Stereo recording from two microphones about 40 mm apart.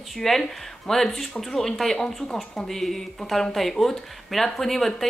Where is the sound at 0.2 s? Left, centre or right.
Centre.